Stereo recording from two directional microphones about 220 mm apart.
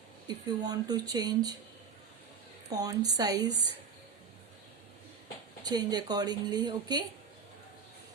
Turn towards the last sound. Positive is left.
turn(degrees=-20)  # may be behind; listen again after turning